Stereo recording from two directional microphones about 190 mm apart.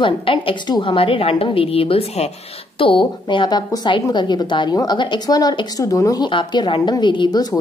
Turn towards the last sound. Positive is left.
turn(degrees=20)  # may be behind; listen again after turning